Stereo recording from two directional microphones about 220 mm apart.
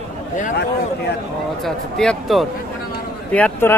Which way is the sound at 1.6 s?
Centre (ahead or behind).